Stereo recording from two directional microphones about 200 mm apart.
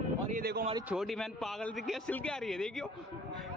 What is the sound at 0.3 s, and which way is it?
Speech, 50° right (ahead or behind).